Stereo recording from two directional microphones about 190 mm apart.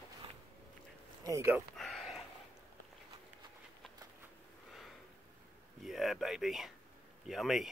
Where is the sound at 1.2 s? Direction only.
15° right (ahead or behind).